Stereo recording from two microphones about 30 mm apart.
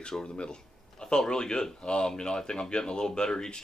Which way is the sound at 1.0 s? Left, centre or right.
Left.